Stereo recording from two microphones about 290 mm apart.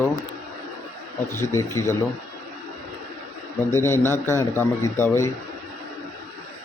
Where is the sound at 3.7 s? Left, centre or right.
Centre.